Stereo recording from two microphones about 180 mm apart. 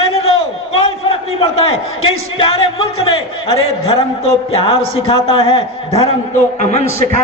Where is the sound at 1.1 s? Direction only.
30° left (ahead or behind).